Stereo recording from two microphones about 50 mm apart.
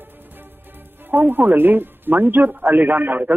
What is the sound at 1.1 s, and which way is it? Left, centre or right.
A woman's voice, right.